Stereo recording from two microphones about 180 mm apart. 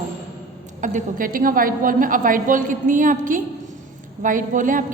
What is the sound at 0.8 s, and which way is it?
A woman's voice, 45° right (ahead or behind).